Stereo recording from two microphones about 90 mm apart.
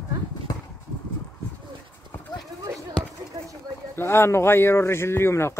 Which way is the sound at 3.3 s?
40° right (ahead or behind).